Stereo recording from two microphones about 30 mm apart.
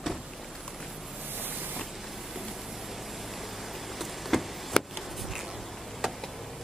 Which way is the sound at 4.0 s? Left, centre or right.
Centre.